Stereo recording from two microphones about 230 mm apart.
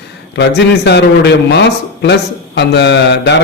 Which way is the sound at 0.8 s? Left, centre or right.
Left.